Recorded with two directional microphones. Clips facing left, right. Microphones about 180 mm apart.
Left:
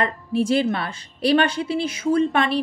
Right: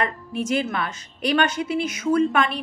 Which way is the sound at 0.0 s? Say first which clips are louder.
Left 4 dB; 30° left (ahead or behind).